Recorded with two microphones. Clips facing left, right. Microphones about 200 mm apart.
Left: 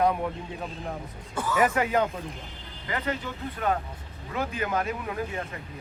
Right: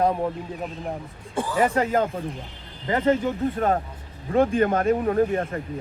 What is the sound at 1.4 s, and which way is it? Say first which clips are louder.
Speech: right 3 dB; 30° right (ahead or behind).